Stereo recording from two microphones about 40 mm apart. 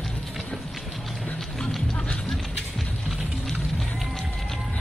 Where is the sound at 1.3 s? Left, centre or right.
Centre.